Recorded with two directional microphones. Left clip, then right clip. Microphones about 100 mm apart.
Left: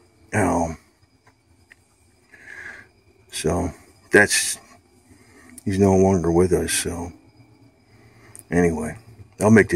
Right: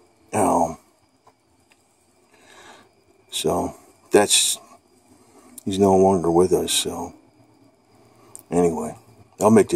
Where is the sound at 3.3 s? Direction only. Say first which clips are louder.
Right 2 dB; 20° right (ahead or behind).